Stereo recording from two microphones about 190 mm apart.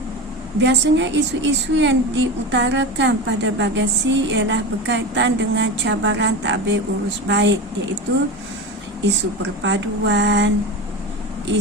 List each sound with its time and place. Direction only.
0.6 s a woman's voice: 70° right (ahead or behind)
9.0 s a woman's voice: 65° right (ahead or behind)